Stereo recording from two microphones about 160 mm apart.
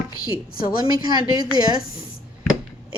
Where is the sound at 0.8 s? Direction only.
25° right (ahead or behind).